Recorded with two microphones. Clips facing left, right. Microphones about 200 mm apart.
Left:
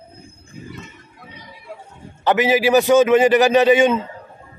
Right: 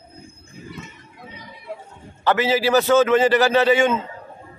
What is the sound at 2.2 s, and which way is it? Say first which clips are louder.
Speech: left 3 dB; 15° left (ahead or behind).